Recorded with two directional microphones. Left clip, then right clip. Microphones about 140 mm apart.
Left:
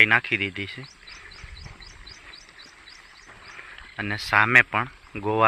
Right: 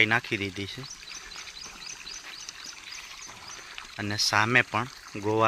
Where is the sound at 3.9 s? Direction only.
20° right (ahead or behind).